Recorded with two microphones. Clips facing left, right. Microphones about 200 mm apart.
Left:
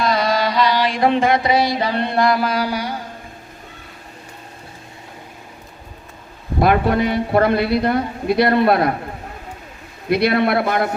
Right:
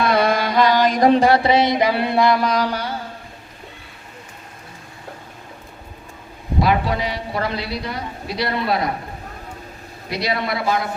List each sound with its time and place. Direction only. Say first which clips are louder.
0.0 s mantra: right 1 dB; 55° right (ahead or behind); by 2.9 s 10° left (ahead or behind)
6.6 s a man's voice: left 4 dB; 55° left (ahead or behind)
10.1 s a man's voice: left 7 dB; 55° left (ahead or behind)